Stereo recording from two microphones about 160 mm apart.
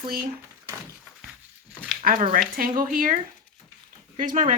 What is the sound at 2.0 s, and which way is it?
Speech, 60° right (ahead or behind).